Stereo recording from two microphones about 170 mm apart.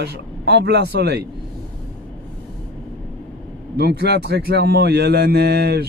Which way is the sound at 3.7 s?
70° right (ahead or behind).